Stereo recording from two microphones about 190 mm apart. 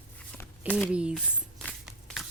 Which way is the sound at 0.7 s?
5° right (ahead or behind).